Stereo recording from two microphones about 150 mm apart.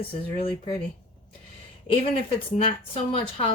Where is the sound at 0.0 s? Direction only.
35° left (ahead or behind).